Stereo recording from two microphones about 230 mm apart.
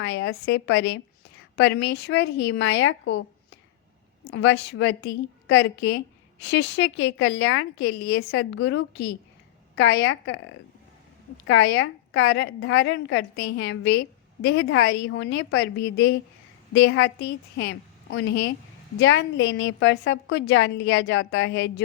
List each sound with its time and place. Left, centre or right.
0.2 s a woman's voice: left
4.2 s a woman's voice: left
11.4 s a woman's voice: left